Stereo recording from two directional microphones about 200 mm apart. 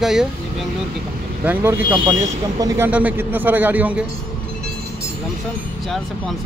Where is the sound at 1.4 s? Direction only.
10° right (ahead or behind).